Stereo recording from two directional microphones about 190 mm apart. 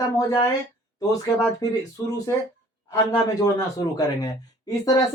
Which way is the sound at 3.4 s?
20° left (ahead or behind).